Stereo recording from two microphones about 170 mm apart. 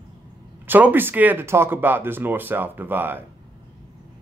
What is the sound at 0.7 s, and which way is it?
Speech, 10° right (ahead or behind).